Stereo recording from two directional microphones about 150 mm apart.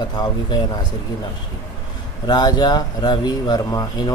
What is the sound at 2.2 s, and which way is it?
Speech, 30° left (ahead or behind).